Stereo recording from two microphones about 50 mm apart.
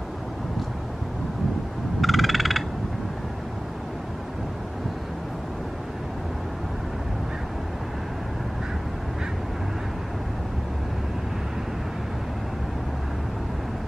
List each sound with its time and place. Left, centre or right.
2.0 s crow: centre